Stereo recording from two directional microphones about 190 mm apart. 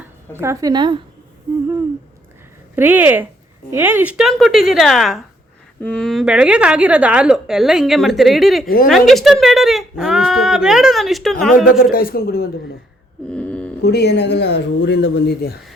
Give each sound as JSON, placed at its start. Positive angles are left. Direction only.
{"t": 0.3, "sound": "speech", "side_deg": -15}
{"t": 2.7, "sound": "speech", "side_deg": -10}
{"t": 11.8, "sound": "a man's voice", "side_deg": 50}
{"t": 13.2, "sound": "mantra", "side_deg": 5}
{"t": 13.8, "sound": "speech", "side_deg": 60}